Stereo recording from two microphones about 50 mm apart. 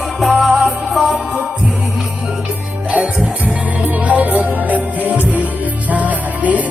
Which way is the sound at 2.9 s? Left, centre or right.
Right.